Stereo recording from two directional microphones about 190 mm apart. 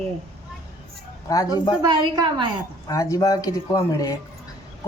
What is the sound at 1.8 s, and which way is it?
Speech, 20° right (ahead or behind).